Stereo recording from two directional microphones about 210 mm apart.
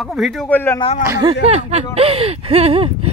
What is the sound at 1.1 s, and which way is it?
Speech, 20° right (ahead or behind).